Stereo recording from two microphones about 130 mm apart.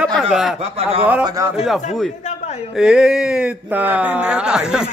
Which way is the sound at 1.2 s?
25° right (ahead or behind).